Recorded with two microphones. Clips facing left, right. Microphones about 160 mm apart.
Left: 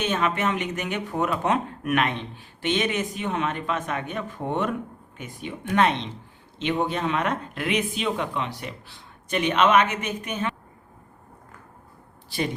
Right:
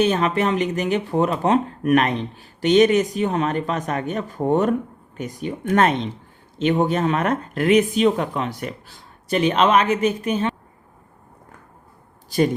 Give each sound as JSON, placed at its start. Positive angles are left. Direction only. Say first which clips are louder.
{"t": 0.0, "sound": "speech", "louder": "right 6 dB", "side_deg": -35}
{"t": 12.3, "sound": "speech", "louder": "right 9 dB", "side_deg": -40}